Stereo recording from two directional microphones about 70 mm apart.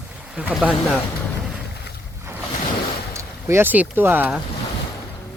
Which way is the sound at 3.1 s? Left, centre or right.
Right.